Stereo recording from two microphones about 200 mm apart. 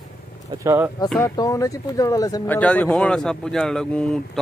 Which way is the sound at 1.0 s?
5° left (ahead or behind).